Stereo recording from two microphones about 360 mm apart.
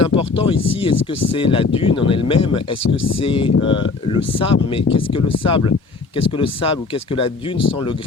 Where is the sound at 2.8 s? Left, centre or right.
Left.